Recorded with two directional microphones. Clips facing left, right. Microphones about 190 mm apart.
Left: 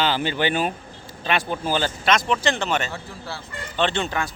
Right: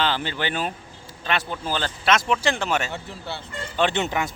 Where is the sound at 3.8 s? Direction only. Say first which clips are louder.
Right 1 dB; 15° right (ahead or behind).